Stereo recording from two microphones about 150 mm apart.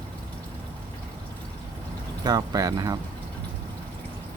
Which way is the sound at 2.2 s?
25° right (ahead or behind).